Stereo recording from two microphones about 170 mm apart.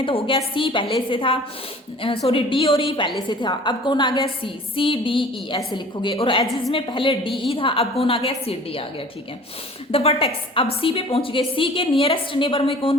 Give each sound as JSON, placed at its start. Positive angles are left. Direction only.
{"t": 0.0, "sound": "a woman's voice", "side_deg": 30}
{"t": 9.9, "sound": "a woman's voice", "side_deg": 35}